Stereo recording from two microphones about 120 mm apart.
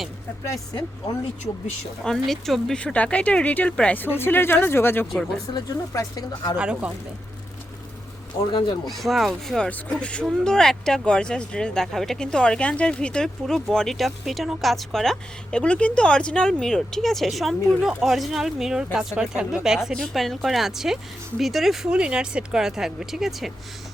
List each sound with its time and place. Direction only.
0.4 s speech: 30° left (ahead or behind)
2.0 s speech: centre (ahead or behind); by 5.0 s 20° left (ahead or behind)
5.1 s speech: 5° left (ahead or behind)
5.9 s speech: 30° left (ahead or behind)
6.6 s speech: 10° right (ahead or behind)
8.9 s speech: centre (ahead or behind)